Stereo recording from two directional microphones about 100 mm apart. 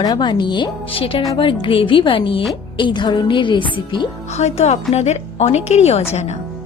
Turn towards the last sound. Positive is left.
turn(degrees=90)